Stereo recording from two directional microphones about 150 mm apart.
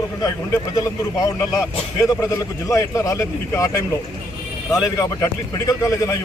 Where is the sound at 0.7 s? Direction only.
25° left (ahead or behind).